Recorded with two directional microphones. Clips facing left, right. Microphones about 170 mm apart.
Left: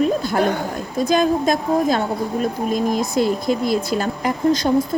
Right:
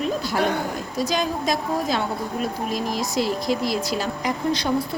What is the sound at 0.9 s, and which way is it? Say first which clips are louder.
A woman's voice: left 8 dB; 50° left (ahead or behind).